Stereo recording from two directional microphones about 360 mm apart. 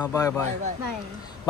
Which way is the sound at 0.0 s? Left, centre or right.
Centre.